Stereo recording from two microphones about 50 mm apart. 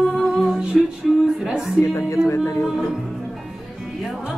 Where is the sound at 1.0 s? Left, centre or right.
Centre.